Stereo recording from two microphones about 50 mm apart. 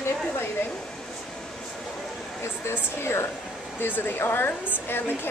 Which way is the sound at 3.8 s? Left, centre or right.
Left.